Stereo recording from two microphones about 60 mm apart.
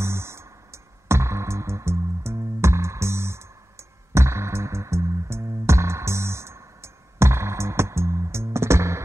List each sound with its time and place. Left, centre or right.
0.0 s music: right